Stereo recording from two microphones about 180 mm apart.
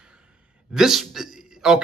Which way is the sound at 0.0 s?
5° right (ahead or behind).